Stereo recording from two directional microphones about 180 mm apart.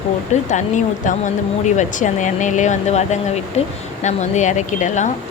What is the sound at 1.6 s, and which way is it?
Speech, 40° left (ahead or behind).